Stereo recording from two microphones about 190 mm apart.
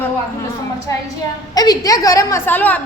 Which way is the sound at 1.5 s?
20° left (ahead or behind).